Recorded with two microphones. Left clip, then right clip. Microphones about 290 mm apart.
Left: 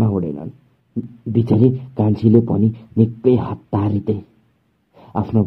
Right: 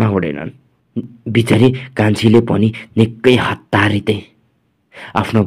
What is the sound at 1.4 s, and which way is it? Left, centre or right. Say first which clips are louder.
Speech: right 4 dB; right.